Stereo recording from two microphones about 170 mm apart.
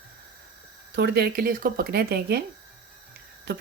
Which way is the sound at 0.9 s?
75° right (ahead or behind).